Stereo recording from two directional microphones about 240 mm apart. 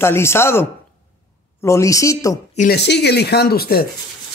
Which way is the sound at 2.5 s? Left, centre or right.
Left.